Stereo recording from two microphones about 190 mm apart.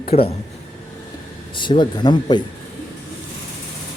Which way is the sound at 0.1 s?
30° left (ahead or behind).